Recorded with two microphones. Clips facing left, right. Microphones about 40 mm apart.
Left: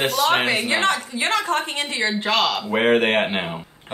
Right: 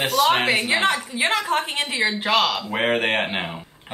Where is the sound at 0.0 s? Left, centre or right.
Centre.